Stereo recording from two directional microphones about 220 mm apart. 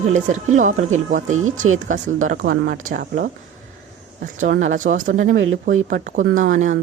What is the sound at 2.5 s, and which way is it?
Speech, 45° right (ahead or behind).